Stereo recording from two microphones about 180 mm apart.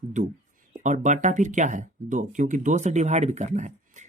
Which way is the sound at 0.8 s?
45° right (ahead or behind).